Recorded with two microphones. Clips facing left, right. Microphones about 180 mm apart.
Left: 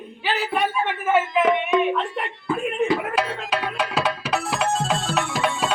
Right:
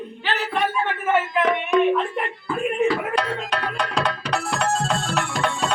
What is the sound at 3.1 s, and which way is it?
Music, 5° left (ahead or behind).